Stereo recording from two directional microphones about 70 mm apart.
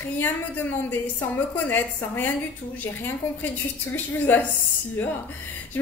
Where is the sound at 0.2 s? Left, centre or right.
Left.